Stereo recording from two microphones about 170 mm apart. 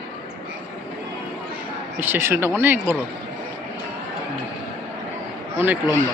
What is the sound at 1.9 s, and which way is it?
A man's voice, 15° right (ahead or behind).